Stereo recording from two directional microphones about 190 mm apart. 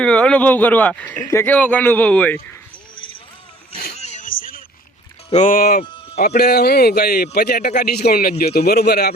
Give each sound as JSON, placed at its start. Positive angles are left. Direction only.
{"t": 0.0, "sound": "speech", "side_deg": 5}
{"t": 3.9, "sound": "a sound", "side_deg": 35}
{"t": 5.3, "sound": "speech", "side_deg": 40}
{"t": 5.8, "sound": "music", "side_deg": 25}
{"t": 6.1, "sound": "a man's voice", "side_deg": 55}